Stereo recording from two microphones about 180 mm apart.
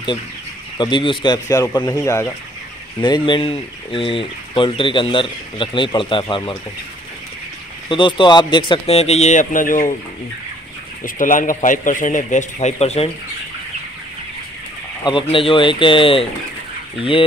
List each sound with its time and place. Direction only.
0.7 s speech: 25° left (ahead or behind)
7.9 s speech: 25° left (ahead or behind); by 9.9 s 50° left (ahead or behind)
11.1 s a man's voice: 45° left (ahead or behind)
15.0 s speech: 30° left (ahead or behind)